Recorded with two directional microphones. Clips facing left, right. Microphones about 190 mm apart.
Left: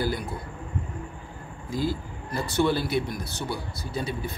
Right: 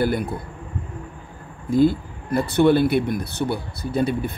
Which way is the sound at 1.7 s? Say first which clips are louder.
Right 11 dB; 60° right (ahead or behind).